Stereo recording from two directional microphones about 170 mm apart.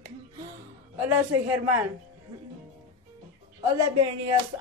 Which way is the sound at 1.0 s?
10° right (ahead or behind).